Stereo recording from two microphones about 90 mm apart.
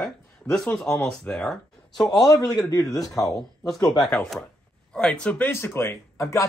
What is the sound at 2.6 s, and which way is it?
A man's voice, 45° left (ahead or behind).